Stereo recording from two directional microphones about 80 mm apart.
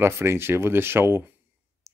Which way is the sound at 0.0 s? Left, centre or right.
Right.